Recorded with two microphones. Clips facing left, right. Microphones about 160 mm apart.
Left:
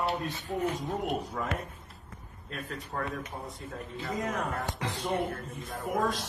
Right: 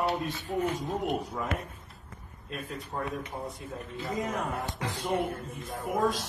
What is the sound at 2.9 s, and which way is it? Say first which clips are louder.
Speech: even; 15° right (ahead or behind).